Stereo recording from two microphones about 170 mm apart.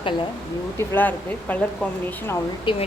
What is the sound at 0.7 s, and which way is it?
Speech, 10° left (ahead or behind).